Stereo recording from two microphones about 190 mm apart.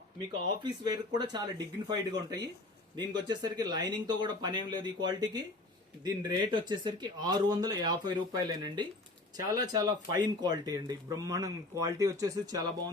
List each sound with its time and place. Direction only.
0.6 s speech: 20° right (ahead or behind)